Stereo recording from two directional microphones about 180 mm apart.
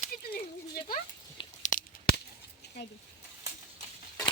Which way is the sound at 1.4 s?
25° left (ahead or behind).